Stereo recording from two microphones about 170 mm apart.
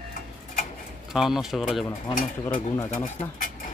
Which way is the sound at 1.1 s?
Centre (ahead or behind).